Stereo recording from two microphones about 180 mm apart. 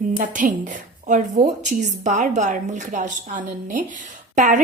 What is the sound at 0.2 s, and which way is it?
A woman's voice, 45° right (ahead or behind).